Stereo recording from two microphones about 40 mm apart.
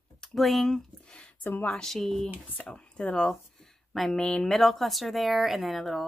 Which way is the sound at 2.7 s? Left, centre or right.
Left.